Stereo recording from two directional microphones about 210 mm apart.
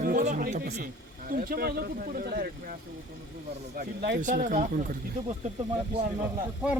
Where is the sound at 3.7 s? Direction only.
45° right (ahead or behind).